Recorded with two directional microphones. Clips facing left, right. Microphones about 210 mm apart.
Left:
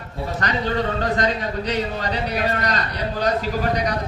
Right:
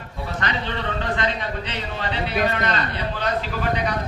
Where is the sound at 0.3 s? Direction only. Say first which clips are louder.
Left 5 dB; 40° left (ahead or behind).